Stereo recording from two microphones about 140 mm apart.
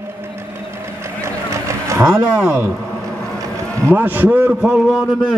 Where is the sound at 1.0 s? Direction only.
20° right (ahead or behind).